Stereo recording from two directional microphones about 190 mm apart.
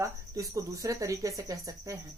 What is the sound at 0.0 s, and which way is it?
Speech, 15° right (ahead or behind).